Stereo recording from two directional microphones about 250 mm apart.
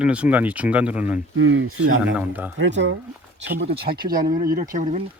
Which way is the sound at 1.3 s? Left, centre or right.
Right.